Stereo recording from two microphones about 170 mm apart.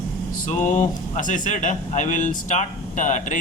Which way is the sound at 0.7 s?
50° left (ahead or behind).